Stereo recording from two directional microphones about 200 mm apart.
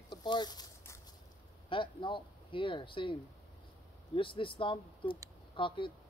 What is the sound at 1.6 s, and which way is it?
Speech, 25° left (ahead or behind).